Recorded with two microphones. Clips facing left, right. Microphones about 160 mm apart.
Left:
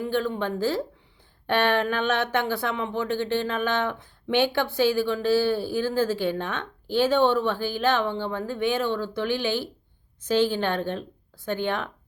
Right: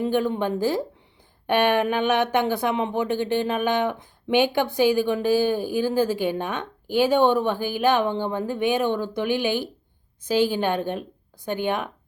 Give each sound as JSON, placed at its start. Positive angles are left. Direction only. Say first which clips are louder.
{"t": 0.0, "sound": "speech", "louder": "right 3 dB", "side_deg": -15}